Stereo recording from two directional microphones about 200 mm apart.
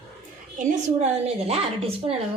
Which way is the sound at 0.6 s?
35° right (ahead or behind).